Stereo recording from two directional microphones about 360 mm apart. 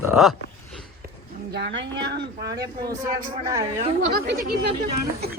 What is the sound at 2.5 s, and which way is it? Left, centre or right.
Speech, centre.